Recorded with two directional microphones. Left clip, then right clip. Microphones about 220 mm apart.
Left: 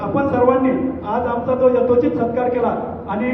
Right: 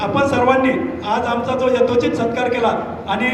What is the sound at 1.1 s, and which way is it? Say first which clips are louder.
Speech: right 1 dB; 45° right (ahead or behind).